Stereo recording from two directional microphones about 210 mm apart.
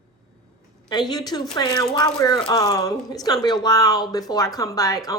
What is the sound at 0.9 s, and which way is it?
Speech, 20° left (ahead or behind).